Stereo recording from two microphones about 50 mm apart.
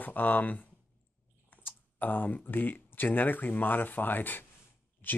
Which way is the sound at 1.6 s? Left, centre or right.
Left.